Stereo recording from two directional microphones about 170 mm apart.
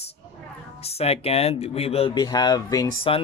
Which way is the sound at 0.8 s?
35° left (ahead or behind).